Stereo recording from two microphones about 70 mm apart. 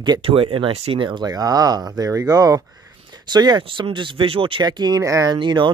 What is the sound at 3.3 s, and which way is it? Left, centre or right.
Speech, right.